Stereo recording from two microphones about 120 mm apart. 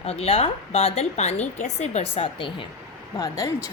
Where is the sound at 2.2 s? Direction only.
45° left (ahead or behind).